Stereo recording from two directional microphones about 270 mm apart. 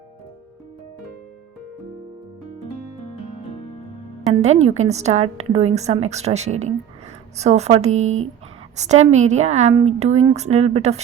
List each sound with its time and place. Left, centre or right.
4.3 s a woman's voice: right